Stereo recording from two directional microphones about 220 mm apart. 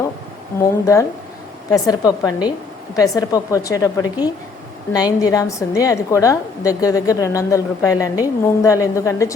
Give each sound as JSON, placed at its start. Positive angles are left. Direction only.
{"t": 0.6, "sound": "a woman's voice", "side_deg": 15}